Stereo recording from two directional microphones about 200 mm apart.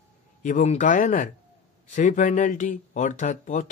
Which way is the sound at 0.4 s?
40° left (ahead or behind).